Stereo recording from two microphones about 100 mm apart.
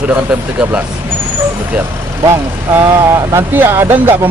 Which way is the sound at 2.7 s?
25° right (ahead or behind).